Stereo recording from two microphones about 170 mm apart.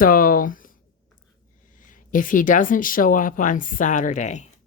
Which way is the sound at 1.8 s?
50° left (ahead or behind).